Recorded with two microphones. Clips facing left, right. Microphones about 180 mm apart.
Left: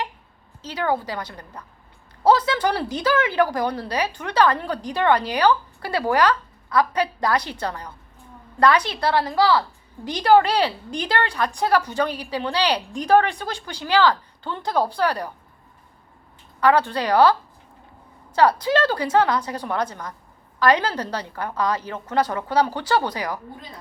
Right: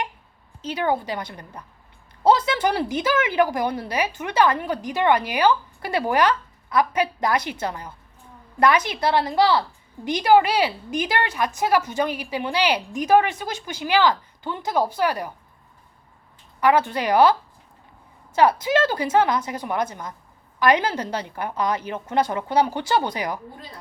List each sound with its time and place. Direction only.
0.7 s a woman's voice: 20° right (ahead or behind)
16.6 s a woman's voice: 15° right (ahead or behind)
18.3 s a woman's voice: 20° right (ahead or behind)